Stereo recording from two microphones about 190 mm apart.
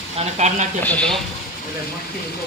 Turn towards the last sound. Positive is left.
turn(degrees=5)  # may be behind; listen again after turning